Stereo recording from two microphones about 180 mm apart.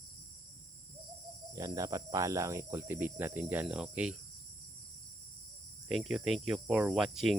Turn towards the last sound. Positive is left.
turn(degrees=0)  # may be behind; listen again after turning